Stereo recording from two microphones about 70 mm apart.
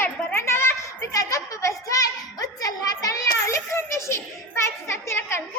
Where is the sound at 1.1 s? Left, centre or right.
Left.